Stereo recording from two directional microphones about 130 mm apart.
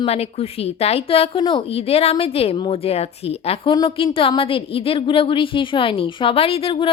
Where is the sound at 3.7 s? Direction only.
35° left (ahead or behind).